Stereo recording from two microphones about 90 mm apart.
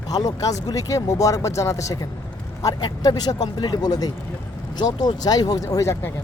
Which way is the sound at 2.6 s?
50° left (ahead or behind).